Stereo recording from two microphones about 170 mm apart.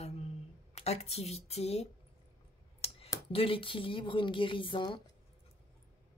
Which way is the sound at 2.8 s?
35° left (ahead or behind).